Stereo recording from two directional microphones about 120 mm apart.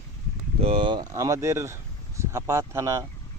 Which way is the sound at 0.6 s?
50° right (ahead or behind).